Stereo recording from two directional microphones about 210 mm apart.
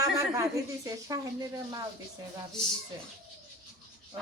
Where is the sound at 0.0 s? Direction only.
15° right (ahead or behind).